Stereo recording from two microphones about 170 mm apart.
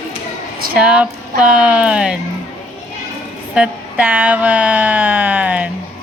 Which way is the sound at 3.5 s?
5° right (ahead or behind).